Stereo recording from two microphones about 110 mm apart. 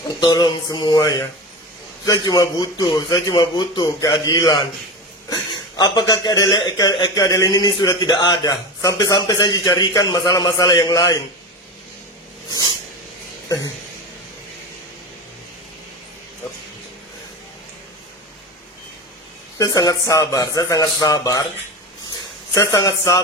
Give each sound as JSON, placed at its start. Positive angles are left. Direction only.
{"t": 0.2, "sound": "speech", "side_deg": 40}
{"t": 2.2, "sound": "speech", "side_deg": 40}
{"t": 19.5, "sound": "speech", "side_deg": 35}
{"t": 22.5, "sound": "speech", "side_deg": 30}